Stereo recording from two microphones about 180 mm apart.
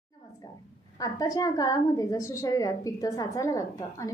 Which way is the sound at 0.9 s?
20° left (ahead or behind).